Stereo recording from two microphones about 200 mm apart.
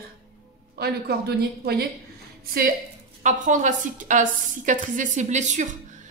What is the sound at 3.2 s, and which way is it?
A woman's voice, 40° right (ahead or behind).